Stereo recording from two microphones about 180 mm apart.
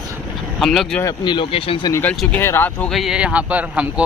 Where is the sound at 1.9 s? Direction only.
5° left (ahead or behind).